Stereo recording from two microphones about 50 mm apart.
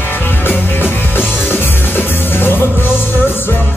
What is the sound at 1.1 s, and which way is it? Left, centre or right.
Music, left.